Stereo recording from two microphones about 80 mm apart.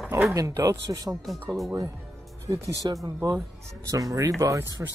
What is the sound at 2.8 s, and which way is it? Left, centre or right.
Speech, right.